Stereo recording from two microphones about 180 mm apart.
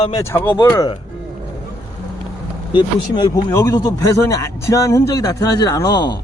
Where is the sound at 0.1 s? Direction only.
15° left (ahead or behind).